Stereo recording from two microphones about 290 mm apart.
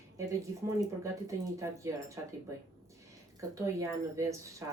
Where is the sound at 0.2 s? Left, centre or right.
Centre.